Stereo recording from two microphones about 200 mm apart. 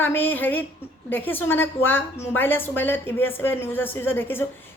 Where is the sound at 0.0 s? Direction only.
10° left (ahead or behind).